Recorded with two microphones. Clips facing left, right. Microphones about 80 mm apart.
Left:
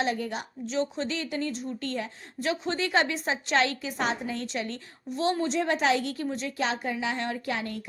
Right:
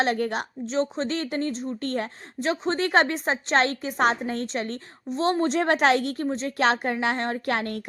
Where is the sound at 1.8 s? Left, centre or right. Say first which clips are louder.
Right 5 dB; right.